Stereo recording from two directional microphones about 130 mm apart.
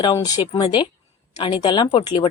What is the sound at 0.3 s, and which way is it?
A woman's voice, 30° left (ahead or behind).